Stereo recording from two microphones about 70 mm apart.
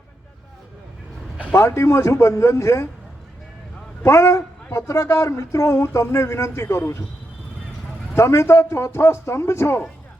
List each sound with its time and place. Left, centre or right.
1.5 s speech: left
4.0 s a man's voice: left
8.1 s a man's voice: left